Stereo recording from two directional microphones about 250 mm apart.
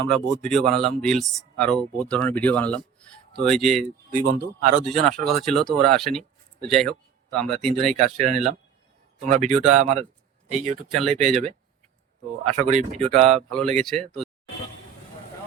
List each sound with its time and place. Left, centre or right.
0.0 s speech: centre
4.1 s speech: right
4.9 s speech: centre
7.9 s speech: right
10.9 s speech: centre
11.2 s speech: right
12.5 s speech: right
13.5 s speech: centre